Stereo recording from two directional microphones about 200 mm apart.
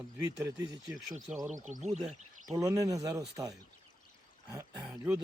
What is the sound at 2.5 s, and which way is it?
Speech, 15° right (ahead or behind).